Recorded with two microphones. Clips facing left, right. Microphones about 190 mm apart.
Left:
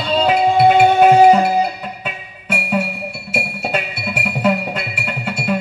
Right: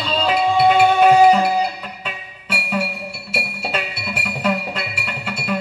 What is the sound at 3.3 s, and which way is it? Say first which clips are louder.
Music: left 3 dB; 50° left (ahead or behind).